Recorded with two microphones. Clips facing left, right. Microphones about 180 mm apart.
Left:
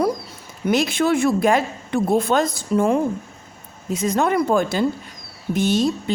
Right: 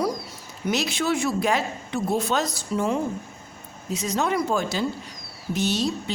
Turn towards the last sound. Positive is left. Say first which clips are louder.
# left 6 dB
turn(degrees=50)  # may be behind; listen again after turning